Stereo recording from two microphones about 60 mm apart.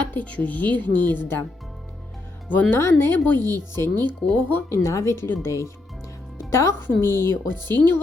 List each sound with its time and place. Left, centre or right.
0.1 s speech: left
2.5 s speech: left
4.8 s a woman's voice: left
6.8 s speech: left